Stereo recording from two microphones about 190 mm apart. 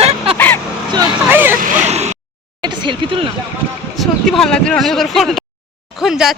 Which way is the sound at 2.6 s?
25° right (ahead or behind).